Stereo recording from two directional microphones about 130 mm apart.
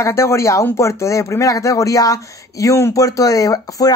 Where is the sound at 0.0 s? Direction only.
20° left (ahead or behind).